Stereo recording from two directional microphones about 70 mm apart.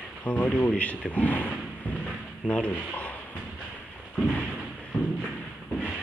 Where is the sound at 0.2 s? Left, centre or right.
Left.